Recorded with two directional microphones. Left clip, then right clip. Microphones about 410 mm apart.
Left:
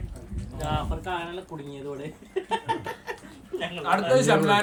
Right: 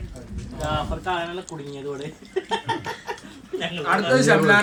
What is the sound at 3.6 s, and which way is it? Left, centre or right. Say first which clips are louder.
Speech: right 3 dB; left.